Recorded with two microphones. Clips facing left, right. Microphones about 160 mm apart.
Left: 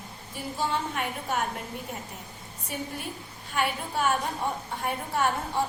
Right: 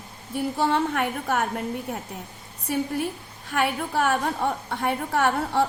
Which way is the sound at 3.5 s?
60° right (ahead or behind).